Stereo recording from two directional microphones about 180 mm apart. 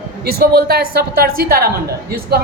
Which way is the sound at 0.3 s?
60° right (ahead or behind).